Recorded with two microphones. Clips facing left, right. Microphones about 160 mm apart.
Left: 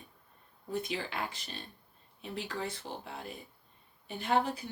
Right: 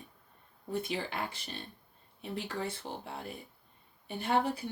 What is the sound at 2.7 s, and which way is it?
Speech, 55° right (ahead or behind).